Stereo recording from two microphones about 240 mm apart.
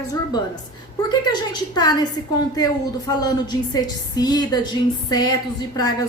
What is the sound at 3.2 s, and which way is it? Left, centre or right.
A woman's voice, centre.